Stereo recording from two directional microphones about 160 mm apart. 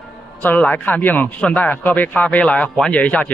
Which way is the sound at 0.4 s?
10° left (ahead or behind).